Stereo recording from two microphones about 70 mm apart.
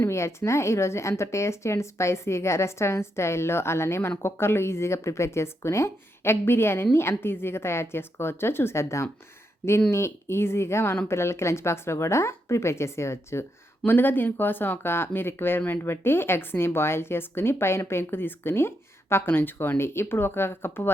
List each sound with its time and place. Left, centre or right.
0.0 s speech: left
13.8 s speech: left